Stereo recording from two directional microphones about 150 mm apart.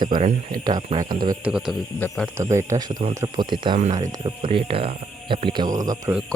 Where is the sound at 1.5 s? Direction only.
5° right (ahead or behind).